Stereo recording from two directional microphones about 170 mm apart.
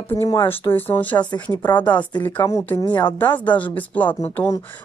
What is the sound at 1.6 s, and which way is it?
Speech, 25° left (ahead or behind).